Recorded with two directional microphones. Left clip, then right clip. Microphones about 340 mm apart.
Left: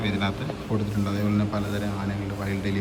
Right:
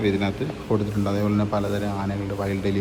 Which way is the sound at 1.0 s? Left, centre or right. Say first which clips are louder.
Right 4 dB; right.